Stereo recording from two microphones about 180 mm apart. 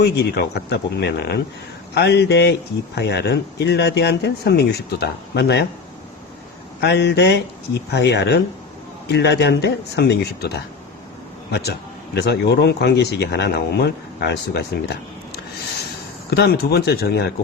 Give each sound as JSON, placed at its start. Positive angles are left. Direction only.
{"t": 0.0, "sound": "speech", "side_deg": 65}
{"t": 6.8, "sound": "speech", "side_deg": 70}
{"t": 12.1, "sound": "speech", "side_deg": 70}
{"t": 16.3, "sound": "speech", "side_deg": 65}